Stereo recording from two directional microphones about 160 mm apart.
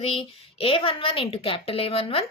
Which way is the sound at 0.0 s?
35° left (ahead or behind).